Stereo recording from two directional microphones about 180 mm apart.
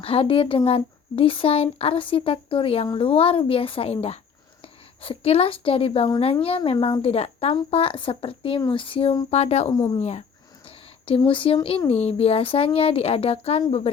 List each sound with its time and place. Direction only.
0.0 s speech: 30° left (ahead or behind)
10.0 s speech: 35° left (ahead or behind)